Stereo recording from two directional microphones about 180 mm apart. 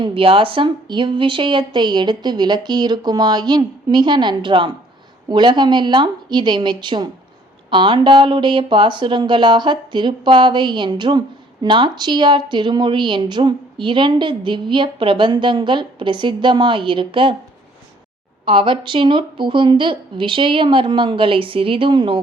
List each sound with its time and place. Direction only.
0.0 s a woman's voice: 30° right (ahead or behind)
18.4 s a woman's voice: 30° right (ahead or behind)